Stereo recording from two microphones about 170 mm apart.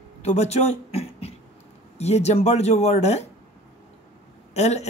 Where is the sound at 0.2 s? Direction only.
40° left (ahead or behind).